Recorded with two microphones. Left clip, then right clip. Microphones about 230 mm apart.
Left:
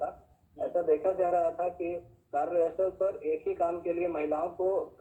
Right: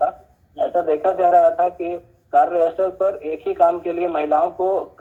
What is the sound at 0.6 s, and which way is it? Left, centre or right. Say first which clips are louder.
Speech: right 9 dB; right.